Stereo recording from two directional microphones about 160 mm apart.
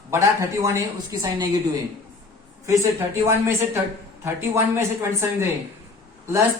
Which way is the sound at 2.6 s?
20° right (ahead or behind).